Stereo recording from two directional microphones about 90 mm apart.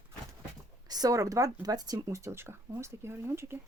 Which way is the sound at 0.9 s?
40° right (ahead or behind).